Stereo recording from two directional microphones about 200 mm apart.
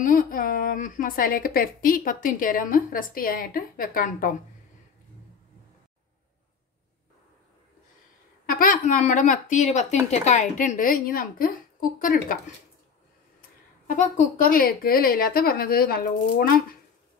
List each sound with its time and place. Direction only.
0.0 s a woman's voice: 45° left (ahead or behind)
8.5 s a woman's voice: 45° left (ahead or behind)
13.8 s a woman's voice: 40° left (ahead or behind)